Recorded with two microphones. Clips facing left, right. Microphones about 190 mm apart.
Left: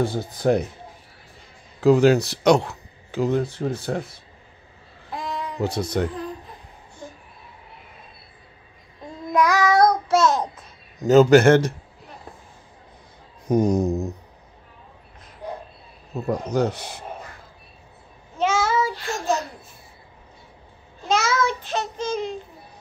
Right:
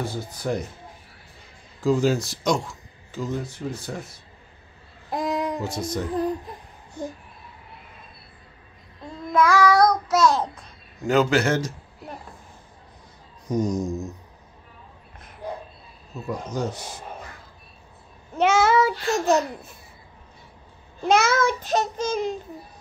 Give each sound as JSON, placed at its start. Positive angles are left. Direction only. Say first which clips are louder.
{"t": 0.0, "sound": "speech", "louder": "left 7 dB", "side_deg": 60}
{"t": 1.8, "sound": "speech", "louder": "left 6 dB", "side_deg": 65}
{"t": 5.1, "sound": "child singing", "louder": "right 5 dB", "side_deg": -40}
{"t": 5.6, "sound": "speech", "louder": "left 4 dB", "side_deg": 65}
{"t": 9.3, "sound": "child singing", "louder": "right 1 dB", "side_deg": 15}
{"t": 11.1, "sound": "speech", "louder": "left 7 dB", "side_deg": 45}
{"t": 13.5, "sound": "speech", "louder": "left 5 dB", "side_deg": 60}
{"t": 16.2, "sound": "speech", "louder": "left 6 dB", "side_deg": 60}
{"t": 18.4, "sound": "child singing", "louder": "right 3 dB", "side_deg": -65}
{"t": 21.1, "sound": "child singing", "louder": "right 2 dB", "side_deg": -55}